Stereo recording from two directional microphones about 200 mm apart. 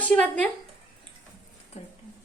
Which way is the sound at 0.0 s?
5° left (ahead or behind).